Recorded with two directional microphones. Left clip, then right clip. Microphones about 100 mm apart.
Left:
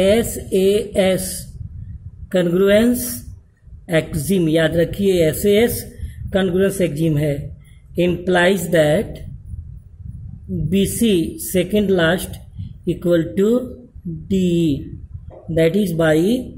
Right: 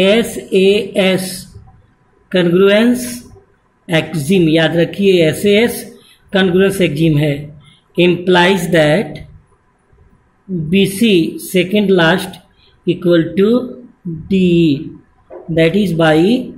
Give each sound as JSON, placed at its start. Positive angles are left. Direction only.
{"t": 0.0, "sound": "speech", "side_deg": 75}
{"t": 4.3, "sound": "speech", "side_deg": 90}
{"t": 6.3, "sound": "speech", "side_deg": 60}
{"t": 10.7, "sound": "speech", "side_deg": 90}